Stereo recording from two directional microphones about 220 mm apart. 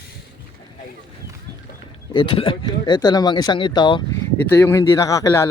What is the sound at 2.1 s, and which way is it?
Speech, 25° left (ahead or behind).